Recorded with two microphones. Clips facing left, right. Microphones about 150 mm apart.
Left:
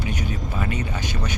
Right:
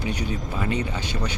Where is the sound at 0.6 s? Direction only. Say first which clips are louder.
Right 2 dB; 25° right (ahead or behind).